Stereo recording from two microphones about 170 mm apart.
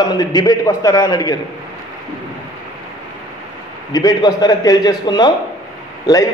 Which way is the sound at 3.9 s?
20° left (ahead or behind).